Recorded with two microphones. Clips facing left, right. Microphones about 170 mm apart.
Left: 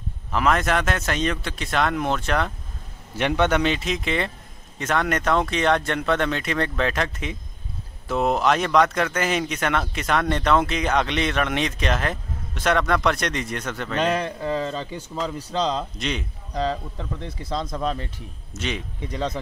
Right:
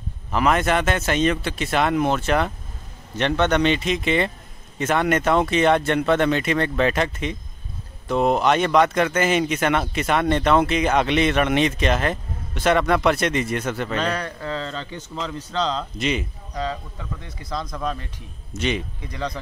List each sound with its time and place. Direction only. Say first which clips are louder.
0.3 s speech: right 2 dB; centre (ahead or behind)
3.2 s speech: right 1 dB; 10° left (ahead or behind)
13.9 s a man's voice: left 2 dB; 20° left (ahead or behind)
16.0 s speech: right 4 dB; 5° right (ahead or behind)
16.6 s speech: left 3 dB; 30° left (ahead or behind)
18.5 s speech: right 5 dB; centre (ahead or behind)